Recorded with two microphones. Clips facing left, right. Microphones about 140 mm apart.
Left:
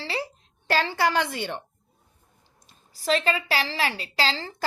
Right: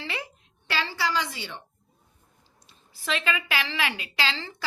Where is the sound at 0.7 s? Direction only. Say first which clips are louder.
Left 5 dB; 50° left (ahead or behind).